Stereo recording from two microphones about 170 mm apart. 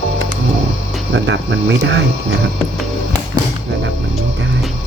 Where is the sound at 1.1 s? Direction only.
90° right.